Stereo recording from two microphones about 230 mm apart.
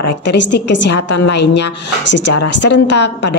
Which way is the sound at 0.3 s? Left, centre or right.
Left.